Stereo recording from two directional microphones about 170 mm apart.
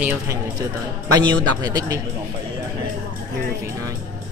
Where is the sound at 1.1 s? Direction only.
25° right (ahead or behind).